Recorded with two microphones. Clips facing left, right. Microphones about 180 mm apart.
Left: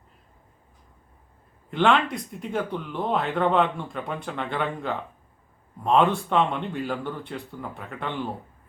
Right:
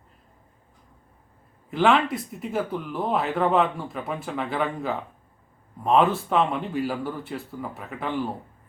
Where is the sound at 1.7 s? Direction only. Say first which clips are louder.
Right 1 dB; 5° right (ahead or behind).